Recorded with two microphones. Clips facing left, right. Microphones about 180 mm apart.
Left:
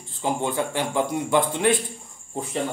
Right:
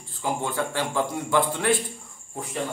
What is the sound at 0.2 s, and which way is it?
Speech, 20° left (ahead or behind).